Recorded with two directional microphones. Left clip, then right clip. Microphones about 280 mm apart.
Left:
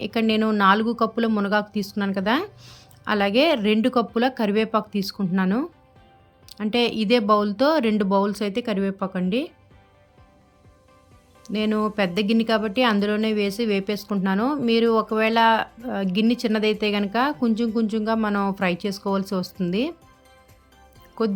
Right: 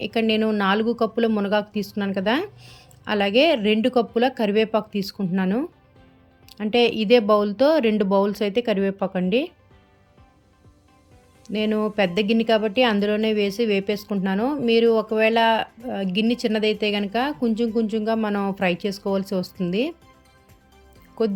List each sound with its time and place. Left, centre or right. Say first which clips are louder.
0.0 s speech: right 1 dB; centre
11.4 s speech: right 1 dB; centre